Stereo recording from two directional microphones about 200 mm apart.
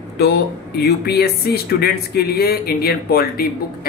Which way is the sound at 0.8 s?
50° left (ahead or behind).